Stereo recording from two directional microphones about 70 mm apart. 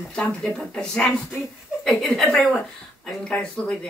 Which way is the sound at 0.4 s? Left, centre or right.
Centre.